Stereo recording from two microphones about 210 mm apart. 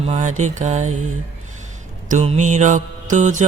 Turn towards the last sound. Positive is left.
turn(degrees=-35)  # may be behind; listen again after turning